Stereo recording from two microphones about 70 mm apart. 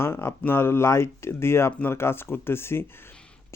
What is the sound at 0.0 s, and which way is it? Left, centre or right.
Speech, left.